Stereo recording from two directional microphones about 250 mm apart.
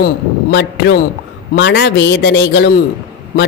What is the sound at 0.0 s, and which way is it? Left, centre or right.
A man's voice, left.